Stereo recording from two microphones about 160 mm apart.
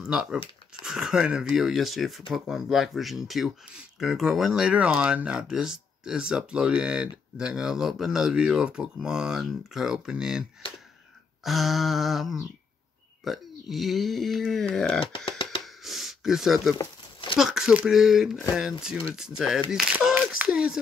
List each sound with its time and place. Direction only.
0.0 s speech: 5° right (ahead or behind)
11.4 s speech: centre (ahead or behind)
15.0 s speech: 35° left (ahead or behind)
15.6 s a sound: centre (ahead or behind)
16.7 s crumpling: 30° left (ahead or behind)
17.4 s speech: 5° right (ahead or behind)